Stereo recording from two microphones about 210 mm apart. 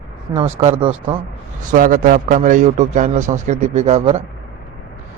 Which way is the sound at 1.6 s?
40° right (ahead or behind).